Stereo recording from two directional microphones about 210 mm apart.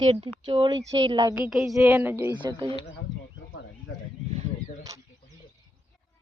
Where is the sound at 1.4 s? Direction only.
Centre (ahead or behind); by 2.7 s 20° right (ahead or behind).